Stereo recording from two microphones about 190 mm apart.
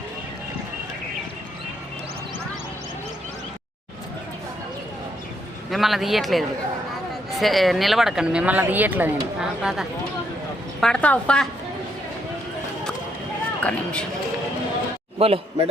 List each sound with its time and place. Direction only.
5.7 s speech: centre (ahead or behind)
13.6 s speech: 5° left (ahead or behind)
15.2 s a man's voice: 30° right (ahead or behind)